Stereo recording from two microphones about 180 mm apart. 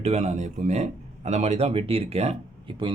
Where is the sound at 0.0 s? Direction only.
40° right (ahead or behind).